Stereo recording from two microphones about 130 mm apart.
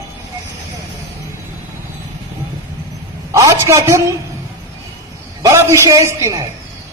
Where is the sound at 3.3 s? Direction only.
25° right (ahead or behind).